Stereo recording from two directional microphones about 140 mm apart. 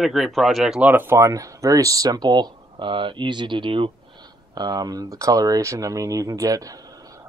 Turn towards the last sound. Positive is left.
turn(degrees=-25)  # may be behind; listen again after turning